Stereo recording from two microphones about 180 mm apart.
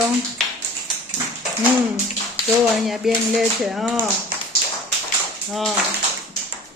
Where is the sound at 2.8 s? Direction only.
Centre (ahead or behind).